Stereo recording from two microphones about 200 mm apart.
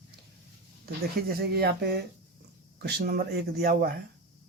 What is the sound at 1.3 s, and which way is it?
Speech, 50° right (ahead or behind).